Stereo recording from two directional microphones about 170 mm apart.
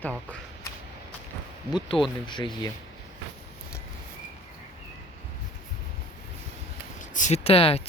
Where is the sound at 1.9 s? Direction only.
30° left (ahead or behind).